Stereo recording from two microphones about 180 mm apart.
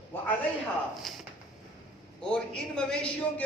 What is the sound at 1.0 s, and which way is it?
A man's voice, centre (ahead or behind).